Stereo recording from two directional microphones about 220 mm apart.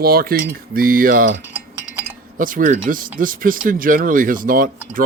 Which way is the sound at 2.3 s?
35° right (ahead or behind).